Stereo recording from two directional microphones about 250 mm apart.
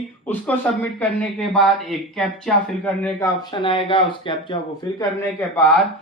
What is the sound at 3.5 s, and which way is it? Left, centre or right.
Speech, centre.